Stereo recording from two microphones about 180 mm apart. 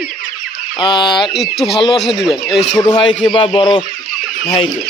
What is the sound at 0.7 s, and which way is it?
Speech, 25° left (ahead or behind).